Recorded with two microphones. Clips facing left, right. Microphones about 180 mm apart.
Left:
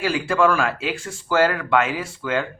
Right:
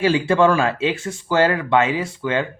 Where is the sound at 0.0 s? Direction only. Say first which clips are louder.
Right 4 dB; 20° right (ahead or behind).